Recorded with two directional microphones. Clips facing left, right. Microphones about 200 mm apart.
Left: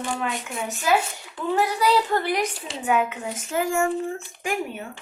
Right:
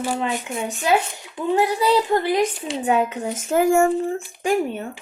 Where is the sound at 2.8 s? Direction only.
35° right (ahead or behind).